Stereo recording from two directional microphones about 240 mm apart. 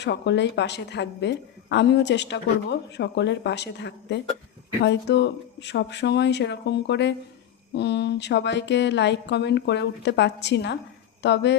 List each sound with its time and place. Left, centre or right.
0.0 s a woman's voice: left